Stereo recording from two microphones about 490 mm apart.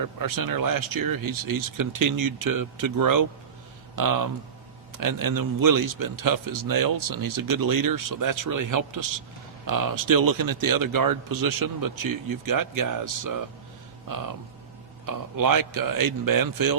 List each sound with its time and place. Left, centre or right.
0.0 s speech: right
15.0 s speech: right